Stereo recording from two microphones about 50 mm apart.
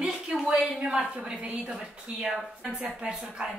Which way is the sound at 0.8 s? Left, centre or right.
Right.